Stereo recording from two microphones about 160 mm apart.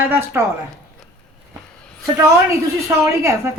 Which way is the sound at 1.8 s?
5° left (ahead or behind).